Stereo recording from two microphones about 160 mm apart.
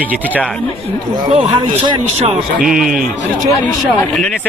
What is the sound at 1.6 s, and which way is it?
Speech, 35° right (ahead or behind).